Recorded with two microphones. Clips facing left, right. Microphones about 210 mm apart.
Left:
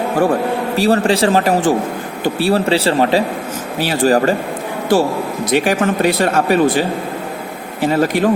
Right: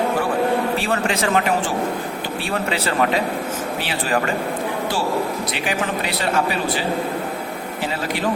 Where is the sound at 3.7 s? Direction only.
40° left (ahead or behind).